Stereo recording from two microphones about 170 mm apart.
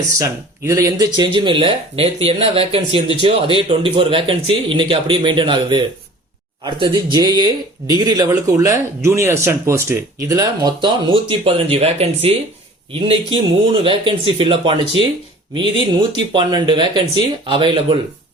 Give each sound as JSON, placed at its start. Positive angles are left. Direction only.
{"t": 0.2, "sound": "speech", "side_deg": -15}